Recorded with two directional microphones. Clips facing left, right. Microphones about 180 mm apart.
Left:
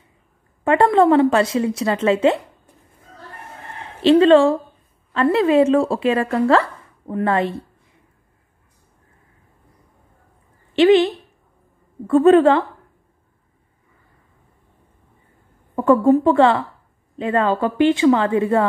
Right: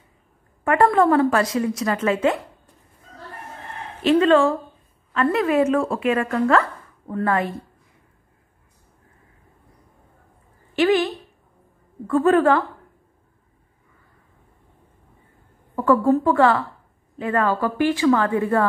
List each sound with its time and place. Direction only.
0.7 s a woman's voice: 25° left (ahead or behind)
4.0 s a woman's voice: 25° left (ahead or behind)
10.7 s a woman's voice: 25° left (ahead or behind)
12.1 s a woman's voice: 25° left (ahead or behind)
15.7 s a woman's voice: 25° left (ahead or behind)